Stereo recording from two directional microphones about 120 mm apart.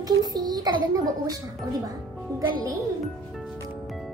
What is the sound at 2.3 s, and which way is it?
Speech, 30° right (ahead or behind).